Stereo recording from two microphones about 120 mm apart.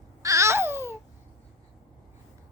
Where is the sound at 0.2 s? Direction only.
25° right (ahead or behind).